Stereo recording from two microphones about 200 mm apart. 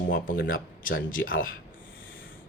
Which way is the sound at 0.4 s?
45° left (ahead or behind).